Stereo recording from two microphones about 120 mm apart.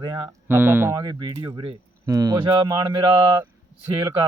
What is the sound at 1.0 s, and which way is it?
Speech, 35° right (ahead or behind).